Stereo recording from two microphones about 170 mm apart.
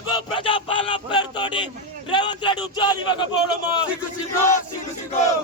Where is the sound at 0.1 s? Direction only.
30° left (ahead or behind).